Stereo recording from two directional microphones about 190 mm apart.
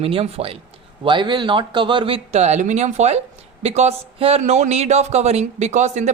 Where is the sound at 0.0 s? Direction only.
30° right (ahead or behind).